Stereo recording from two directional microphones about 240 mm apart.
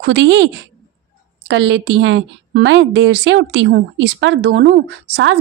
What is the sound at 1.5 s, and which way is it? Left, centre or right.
A woman's voice, right.